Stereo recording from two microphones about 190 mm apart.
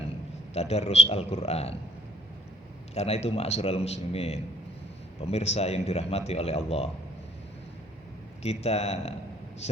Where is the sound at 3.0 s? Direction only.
35° left (ahead or behind).